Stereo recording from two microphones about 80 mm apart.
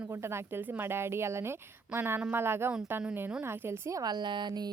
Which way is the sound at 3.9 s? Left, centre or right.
Right.